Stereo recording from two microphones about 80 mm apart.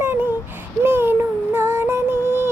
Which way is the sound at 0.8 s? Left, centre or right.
Right.